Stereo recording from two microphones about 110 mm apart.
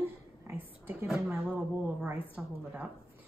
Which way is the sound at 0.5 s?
15° right (ahead or behind).